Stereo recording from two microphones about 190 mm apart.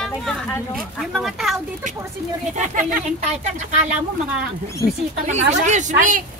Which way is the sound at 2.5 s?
40° right (ahead or behind).